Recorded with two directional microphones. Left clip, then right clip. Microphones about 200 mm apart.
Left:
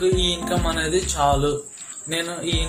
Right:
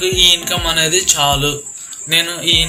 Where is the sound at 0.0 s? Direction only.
45° left (ahead or behind).